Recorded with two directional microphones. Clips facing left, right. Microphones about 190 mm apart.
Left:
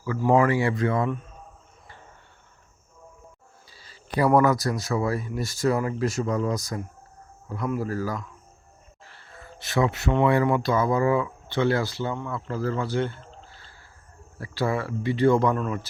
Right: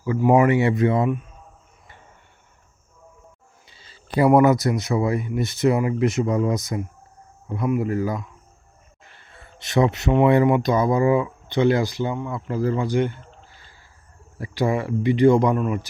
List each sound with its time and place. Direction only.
0.0 s speech: 20° right (ahead or behind)
3.7 s a sound: 25° right (ahead or behind)
4.3 s speech: 20° right (ahead or behind)